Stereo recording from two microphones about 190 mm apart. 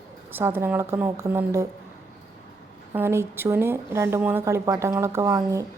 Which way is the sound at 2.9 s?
15° right (ahead or behind).